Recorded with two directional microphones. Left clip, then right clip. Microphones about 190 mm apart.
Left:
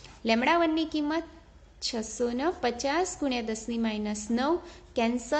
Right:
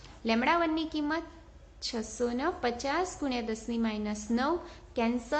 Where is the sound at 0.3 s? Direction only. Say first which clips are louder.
Left 3 dB; 30° left (ahead or behind).